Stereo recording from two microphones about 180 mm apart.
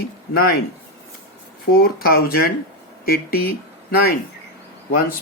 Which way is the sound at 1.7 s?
60° left (ahead or behind).